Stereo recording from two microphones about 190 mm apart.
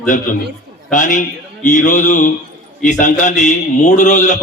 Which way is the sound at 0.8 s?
45° left (ahead or behind).